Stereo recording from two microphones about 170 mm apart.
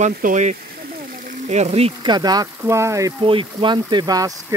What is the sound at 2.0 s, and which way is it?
Speech, 25° right (ahead or behind).